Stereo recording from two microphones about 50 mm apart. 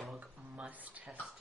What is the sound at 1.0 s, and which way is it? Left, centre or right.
Speech, centre.